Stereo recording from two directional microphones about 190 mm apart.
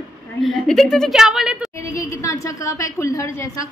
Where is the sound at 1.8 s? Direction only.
15° left (ahead or behind).